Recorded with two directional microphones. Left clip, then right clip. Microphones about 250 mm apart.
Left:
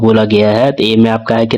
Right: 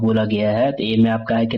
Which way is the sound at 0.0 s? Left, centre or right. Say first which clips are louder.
Left 10 dB; left.